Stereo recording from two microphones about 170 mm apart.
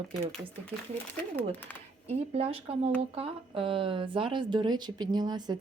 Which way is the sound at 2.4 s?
40° right (ahead or behind).